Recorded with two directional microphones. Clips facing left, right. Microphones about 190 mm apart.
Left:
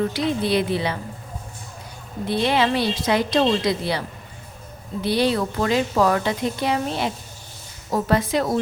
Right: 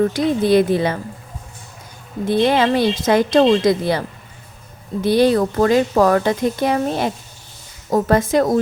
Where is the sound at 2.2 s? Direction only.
45° right (ahead or behind).